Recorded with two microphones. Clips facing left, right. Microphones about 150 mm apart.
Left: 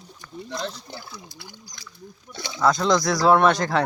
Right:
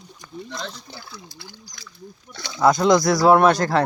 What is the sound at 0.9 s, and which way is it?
Speech, 15° left (ahead or behind).